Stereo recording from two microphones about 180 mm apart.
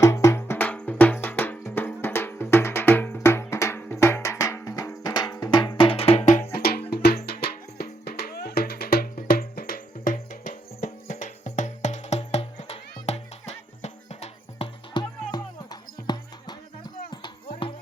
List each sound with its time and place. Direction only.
0.0 s music: 15° left (ahead or behind); by 6.4 s 40° left (ahead or behind)
6.5 s music: 60° left (ahead or behind); by 16.6 s 25° left (ahead or behind)
17.1 s a sound: 25° left (ahead or behind)